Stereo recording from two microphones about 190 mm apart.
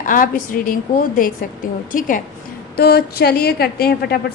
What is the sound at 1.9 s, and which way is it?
Speech, 45° left (ahead or behind).